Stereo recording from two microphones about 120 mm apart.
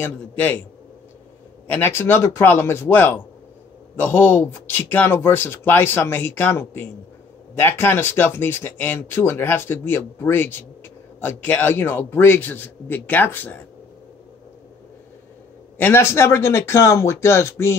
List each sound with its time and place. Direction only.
0.0 s speech: 15° left (ahead or behind)
1.7 s speech: 15° left (ahead or behind)
15.8 s speech: 20° left (ahead or behind)